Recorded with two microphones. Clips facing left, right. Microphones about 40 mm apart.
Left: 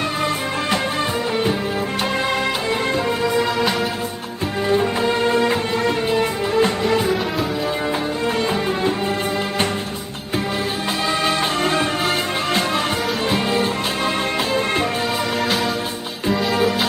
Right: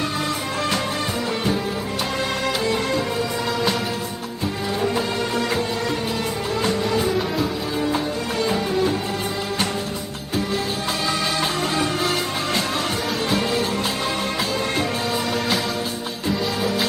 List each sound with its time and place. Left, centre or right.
4.6 s music: left
8.4 s music: left
11.2 s music: left